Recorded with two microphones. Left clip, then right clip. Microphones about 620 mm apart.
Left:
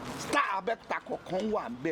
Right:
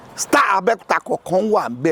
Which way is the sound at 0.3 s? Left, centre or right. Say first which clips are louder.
Right 14 dB; right.